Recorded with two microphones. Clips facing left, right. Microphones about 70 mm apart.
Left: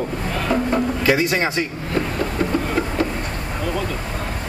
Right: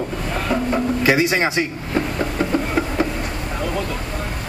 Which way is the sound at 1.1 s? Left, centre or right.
Centre.